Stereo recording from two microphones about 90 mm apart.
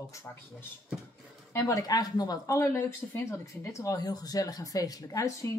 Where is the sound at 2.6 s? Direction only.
30° left (ahead or behind).